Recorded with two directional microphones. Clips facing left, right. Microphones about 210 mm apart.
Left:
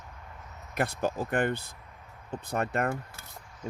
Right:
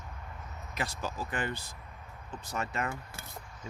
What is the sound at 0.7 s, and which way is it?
Speech, 60° left (ahead or behind).